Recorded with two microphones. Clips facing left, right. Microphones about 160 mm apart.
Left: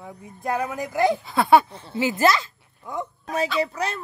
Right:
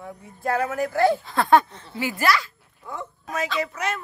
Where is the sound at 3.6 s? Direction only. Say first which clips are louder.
Left 2 dB; 30° left (ahead or behind).